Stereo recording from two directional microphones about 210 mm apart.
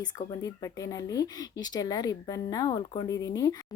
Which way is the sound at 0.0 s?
20° left (ahead or behind).